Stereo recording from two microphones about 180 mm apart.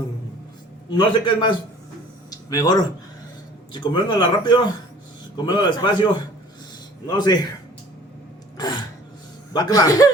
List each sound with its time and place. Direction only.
0.9 s speech: 25° left (ahead or behind)
3.8 s speech: 25° left (ahead or behind)
8.5 s gasp: 20° left (ahead or behind)
9.5 s speech: 20° left (ahead or behind)